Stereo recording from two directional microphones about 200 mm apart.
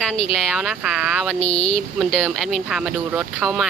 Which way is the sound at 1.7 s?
5° left (ahead or behind).